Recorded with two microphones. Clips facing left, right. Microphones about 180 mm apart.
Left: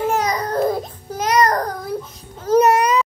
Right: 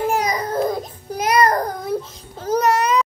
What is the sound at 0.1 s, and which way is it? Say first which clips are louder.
Baby cry: left 1 dB; 10° right (ahead or behind).